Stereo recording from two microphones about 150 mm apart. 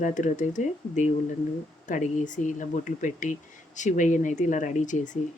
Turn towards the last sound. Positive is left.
turn(degrees=55)  # may be behind; listen again after turning